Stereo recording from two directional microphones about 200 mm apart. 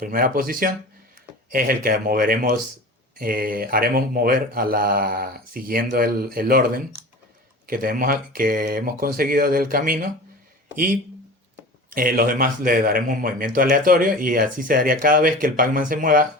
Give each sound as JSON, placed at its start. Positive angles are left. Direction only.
{"t": 0.0, "sound": "speech", "side_deg": -45}
{"t": 11.9, "sound": "speech", "side_deg": -45}